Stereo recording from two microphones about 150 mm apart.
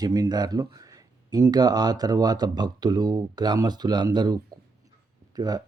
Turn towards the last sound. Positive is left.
turn(degrees=-25)  # may be behind; listen again after turning